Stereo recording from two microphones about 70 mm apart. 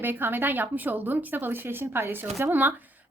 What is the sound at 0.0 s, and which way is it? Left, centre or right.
A woman's voice, right.